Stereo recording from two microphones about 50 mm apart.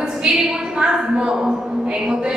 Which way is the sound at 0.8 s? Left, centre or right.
Centre.